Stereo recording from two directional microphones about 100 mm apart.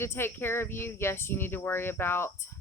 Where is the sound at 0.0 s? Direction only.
25° left (ahead or behind).